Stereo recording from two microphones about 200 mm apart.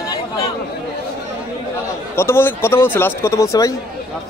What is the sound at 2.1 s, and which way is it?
Speech, 10° left (ahead or behind).